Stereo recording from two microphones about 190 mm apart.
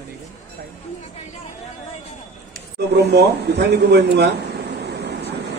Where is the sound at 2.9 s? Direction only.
60° right (ahead or behind).